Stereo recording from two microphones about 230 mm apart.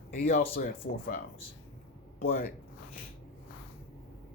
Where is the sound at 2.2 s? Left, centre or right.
Left.